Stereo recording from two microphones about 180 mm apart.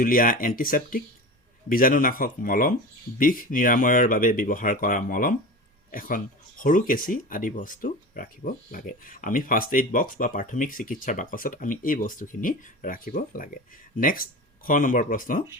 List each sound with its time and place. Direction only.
0.0 s speech: 50° left (ahead or behind)